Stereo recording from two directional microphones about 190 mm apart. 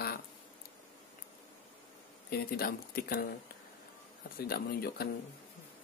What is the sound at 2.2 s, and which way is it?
Speech, 55° left (ahead or behind).